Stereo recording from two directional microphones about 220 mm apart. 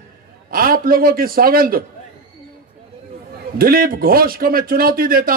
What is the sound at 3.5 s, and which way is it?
A man's voice, 40° right (ahead or behind).